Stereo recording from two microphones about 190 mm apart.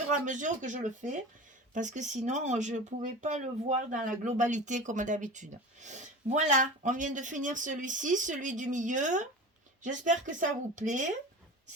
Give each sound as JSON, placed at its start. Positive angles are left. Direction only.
{"t": 0.3, "sound": "speech", "side_deg": -40}